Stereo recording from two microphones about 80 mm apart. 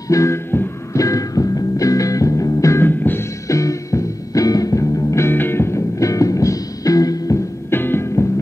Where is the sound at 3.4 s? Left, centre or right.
Left.